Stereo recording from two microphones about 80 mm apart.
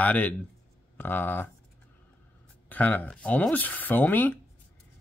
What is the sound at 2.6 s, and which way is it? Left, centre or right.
Speech, left.